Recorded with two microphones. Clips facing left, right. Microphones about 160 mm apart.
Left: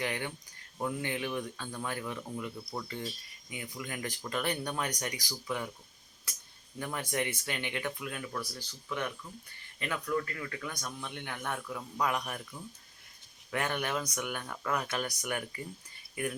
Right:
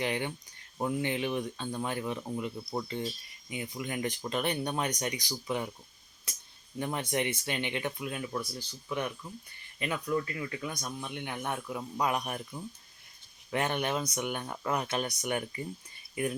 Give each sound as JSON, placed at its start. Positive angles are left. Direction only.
{"t": 0.0, "sound": "speech", "side_deg": -20}